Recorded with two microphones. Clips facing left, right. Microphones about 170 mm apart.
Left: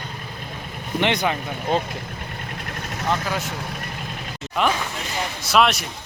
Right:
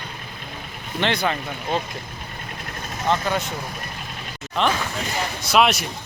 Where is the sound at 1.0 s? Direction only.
15° left (ahead or behind).